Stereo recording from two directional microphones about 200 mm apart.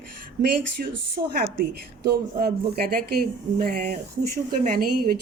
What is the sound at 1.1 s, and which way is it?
A woman's voice, 50° right (ahead or behind).